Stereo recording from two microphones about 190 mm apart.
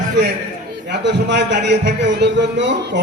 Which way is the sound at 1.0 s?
65° right (ahead or behind).